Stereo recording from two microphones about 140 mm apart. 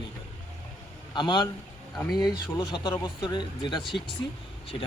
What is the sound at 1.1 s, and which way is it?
Speech, 30° left (ahead or behind).